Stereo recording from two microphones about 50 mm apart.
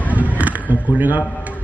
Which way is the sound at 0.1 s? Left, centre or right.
Right.